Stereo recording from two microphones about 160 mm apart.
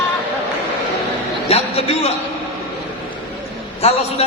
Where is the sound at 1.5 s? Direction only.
40° left (ahead or behind).